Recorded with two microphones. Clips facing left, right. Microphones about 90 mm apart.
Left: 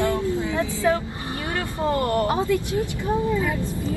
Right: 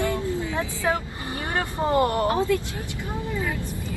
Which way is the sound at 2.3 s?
20° left (ahead or behind).